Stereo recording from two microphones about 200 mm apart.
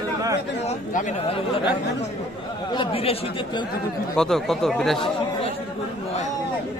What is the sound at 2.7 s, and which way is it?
Speech, 25° left (ahead or behind).